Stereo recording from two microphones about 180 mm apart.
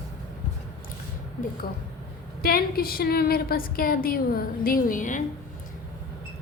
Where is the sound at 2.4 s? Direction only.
55° left (ahead or behind).